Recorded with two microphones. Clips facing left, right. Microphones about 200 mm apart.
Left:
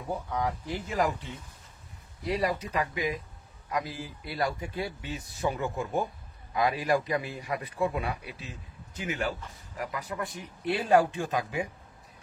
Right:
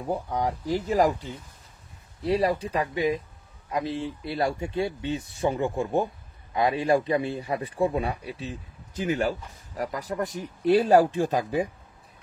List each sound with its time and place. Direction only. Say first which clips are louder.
0.0 s speech: right 4 dB; 35° right (ahead or behind)